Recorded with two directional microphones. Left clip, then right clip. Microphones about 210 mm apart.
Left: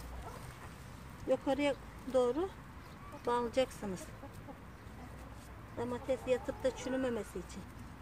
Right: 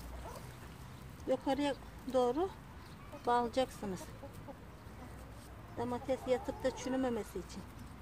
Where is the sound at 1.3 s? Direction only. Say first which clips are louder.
Left 2 dB; 10° right (ahead or behind).